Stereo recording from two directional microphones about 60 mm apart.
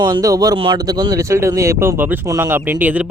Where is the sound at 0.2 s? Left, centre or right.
Right.